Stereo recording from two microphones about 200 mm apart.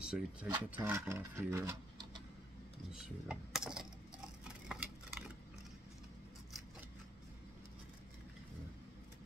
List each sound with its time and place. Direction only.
0.0 s speech: 5° right (ahead or behind)
2.9 s speech: 5° right (ahead or behind)
4.5 s a sound: 5° right (ahead or behind)